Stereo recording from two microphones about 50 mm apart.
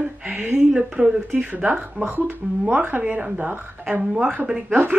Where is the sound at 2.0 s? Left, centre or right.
Right.